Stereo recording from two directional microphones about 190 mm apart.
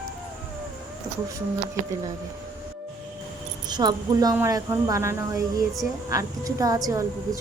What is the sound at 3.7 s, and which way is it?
A woman's voice, 20° right (ahead or behind).